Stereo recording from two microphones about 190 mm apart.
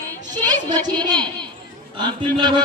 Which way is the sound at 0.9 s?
20° right (ahead or behind).